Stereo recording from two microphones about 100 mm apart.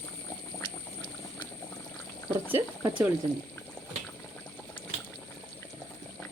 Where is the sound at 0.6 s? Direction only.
45° left (ahead or behind).